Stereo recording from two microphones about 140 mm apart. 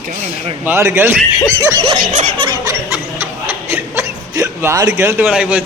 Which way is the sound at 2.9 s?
15° right (ahead or behind).